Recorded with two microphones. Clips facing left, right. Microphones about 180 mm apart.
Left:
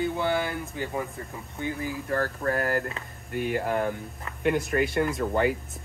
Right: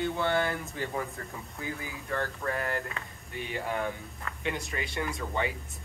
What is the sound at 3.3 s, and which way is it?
Speech, 55° left (ahead or behind).